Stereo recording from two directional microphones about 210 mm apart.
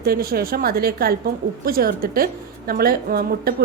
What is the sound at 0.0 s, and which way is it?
A woman's voice, 45° right (ahead or behind).